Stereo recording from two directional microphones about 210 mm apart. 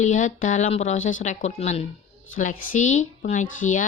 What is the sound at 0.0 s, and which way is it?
A woman's voice, 35° left (ahead or behind).